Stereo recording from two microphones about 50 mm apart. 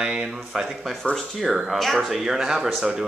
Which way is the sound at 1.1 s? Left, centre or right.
Centre.